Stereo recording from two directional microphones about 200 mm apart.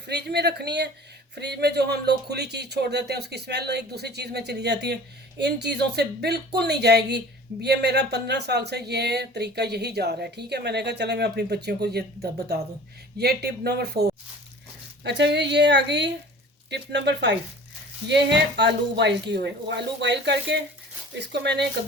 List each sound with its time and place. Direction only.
0.0 s speech: 55° right (ahead or behind)